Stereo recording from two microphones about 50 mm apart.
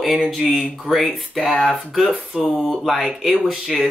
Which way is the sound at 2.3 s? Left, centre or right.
Centre.